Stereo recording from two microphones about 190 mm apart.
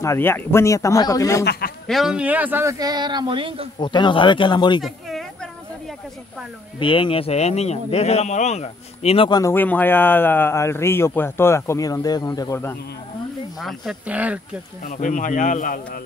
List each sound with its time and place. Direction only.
0.0 s a man's voice: 15° left (ahead or behind)
1.4 s a man's voice: 60° left (ahead or behind)
1.9 s speech: centre (ahead or behind); by 3.6 s 25° right (ahead or behind)
3.8 s speech: 25° left (ahead or behind)
4.8 s a sound: centre (ahead or behind)
6.8 s speech: 25° left (ahead or behind)
9.4 s a man's voice: 10° left (ahead or behind)
13.6 s speech: centre (ahead or behind)
14.8 s speech: 45° left (ahead or behind)